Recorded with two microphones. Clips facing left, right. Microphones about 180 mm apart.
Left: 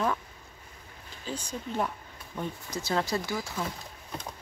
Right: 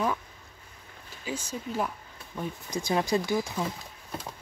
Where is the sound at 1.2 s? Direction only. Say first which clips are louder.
Right 2 dB; 5° right (ahead or behind).